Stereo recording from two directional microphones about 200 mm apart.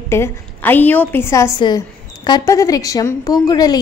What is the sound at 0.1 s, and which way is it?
A woman's voice, 10° left (ahead or behind).